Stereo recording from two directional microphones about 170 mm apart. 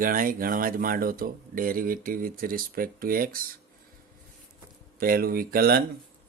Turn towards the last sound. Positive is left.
turn(degrees=-60)  # may be behind; listen again after turning